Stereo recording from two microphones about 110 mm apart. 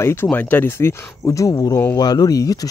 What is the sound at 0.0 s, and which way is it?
Speech, 20° left (ahead or behind).